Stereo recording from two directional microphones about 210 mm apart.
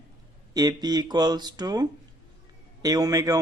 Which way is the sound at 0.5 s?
20° right (ahead or behind).